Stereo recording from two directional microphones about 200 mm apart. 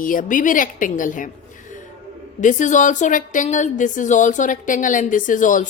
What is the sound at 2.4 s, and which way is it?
A woman's voice, 40° left (ahead or behind).